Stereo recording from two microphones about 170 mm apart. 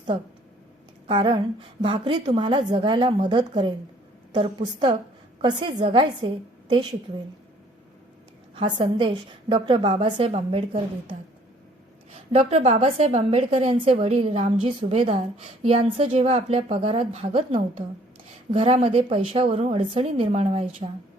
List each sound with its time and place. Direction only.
1.0 s a woman's voice: 30° right (ahead or behind)
8.5 s a woman's voice: 30° right (ahead or behind)
12.1 s a woman's voice: 35° right (ahead or behind)